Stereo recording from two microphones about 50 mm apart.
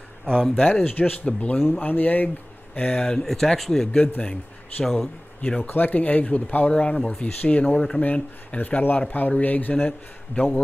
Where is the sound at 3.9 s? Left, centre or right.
Left.